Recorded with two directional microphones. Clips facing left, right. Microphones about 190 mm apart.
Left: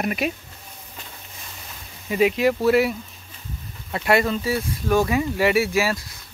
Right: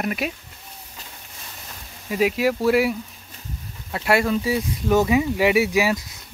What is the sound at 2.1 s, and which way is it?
Speech, 5° right (ahead or behind).